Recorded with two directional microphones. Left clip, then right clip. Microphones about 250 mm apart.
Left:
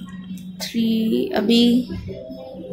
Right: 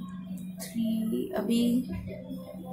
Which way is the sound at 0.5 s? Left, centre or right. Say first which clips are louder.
Left 11 dB; centre.